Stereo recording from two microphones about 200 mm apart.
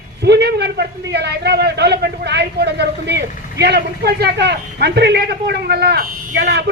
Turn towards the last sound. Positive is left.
turn(degrees=-55)  # may be behind; listen again after turning